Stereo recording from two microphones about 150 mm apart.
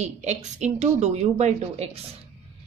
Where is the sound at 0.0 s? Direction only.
50° right (ahead or behind).